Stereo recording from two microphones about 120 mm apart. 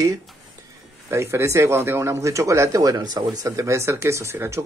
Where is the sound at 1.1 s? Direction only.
25° right (ahead or behind).